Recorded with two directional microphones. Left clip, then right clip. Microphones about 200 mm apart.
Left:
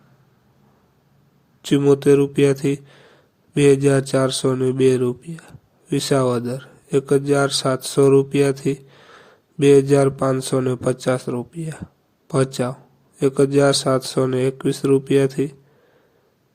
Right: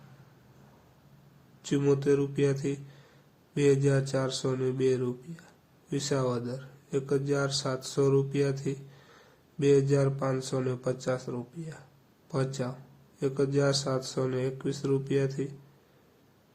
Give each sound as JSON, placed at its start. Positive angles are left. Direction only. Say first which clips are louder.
{"t": 1.9, "sound": "speech", "louder": "left 11 dB", "side_deg": 40}